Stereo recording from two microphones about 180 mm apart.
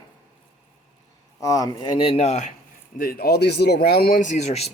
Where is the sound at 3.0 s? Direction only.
55° left (ahead or behind); by 4.7 s 40° left (ahead or behind).